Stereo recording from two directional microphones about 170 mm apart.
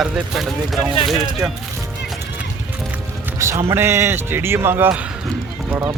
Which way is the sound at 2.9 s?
15° right (ahead or behind).